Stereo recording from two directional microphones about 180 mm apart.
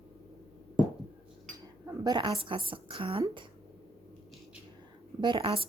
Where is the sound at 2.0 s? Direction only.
25° right (ahead or behind).